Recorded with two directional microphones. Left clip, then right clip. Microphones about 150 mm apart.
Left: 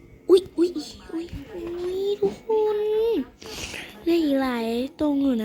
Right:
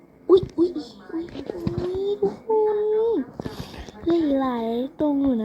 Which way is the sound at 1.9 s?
30° left (ahead or behind).